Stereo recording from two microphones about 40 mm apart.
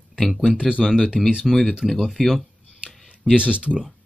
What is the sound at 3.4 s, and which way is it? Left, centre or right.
Speech, right.